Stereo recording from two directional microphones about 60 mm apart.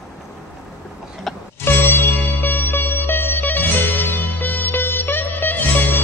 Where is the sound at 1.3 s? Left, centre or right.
Centre.